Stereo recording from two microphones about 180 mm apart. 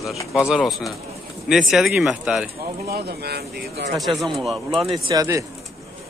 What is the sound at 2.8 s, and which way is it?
Speech, 60° right (ahead or behind).